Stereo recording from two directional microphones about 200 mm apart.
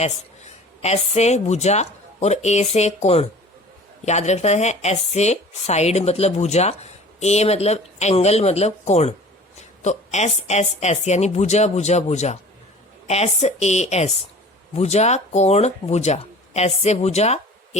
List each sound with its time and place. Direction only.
0.8 s speech: 30° left (ahead or behind)